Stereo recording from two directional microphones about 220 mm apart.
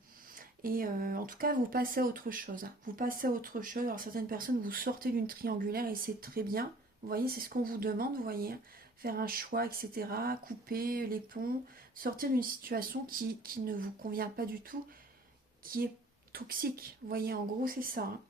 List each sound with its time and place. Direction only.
0.3 s speech: 40° right (ahead or behind)